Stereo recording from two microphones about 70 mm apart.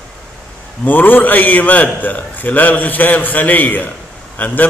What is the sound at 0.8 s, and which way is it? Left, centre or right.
A man's voice, left.